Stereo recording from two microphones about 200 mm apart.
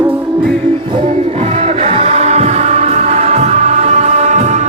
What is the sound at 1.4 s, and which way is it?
Music, 30° right (ahead or behind).